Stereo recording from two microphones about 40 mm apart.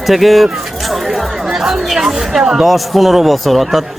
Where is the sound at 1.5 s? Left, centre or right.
Centre.